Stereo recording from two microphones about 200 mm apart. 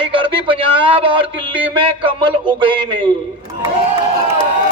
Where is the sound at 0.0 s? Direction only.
25° right (ahead or behind).